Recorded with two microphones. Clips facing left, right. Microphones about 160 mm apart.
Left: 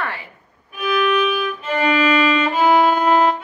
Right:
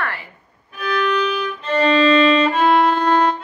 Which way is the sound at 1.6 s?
15° left (ahead or behind).